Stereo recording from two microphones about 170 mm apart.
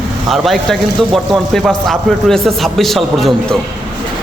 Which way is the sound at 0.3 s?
Centre (ahead or behind).